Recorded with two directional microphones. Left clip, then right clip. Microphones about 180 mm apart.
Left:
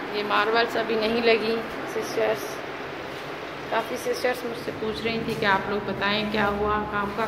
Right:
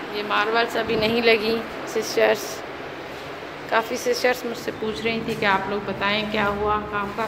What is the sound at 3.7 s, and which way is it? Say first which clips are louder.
Speech: right 5 dB; 35° right (ahead or behind).